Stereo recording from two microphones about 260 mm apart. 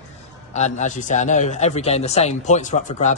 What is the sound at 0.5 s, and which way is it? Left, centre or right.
A man's voice, left.